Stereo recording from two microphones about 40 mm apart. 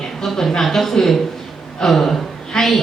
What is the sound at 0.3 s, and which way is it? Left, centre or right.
A woman's voice, centre.